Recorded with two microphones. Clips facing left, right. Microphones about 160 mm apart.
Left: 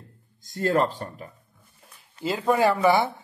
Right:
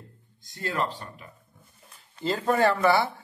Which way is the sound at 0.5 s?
45° left (ahead or behind).